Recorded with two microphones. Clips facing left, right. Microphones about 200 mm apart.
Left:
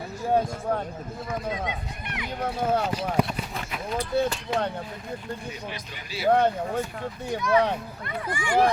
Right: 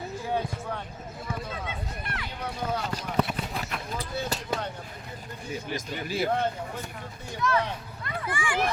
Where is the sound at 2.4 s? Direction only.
50° left (ahead or behind).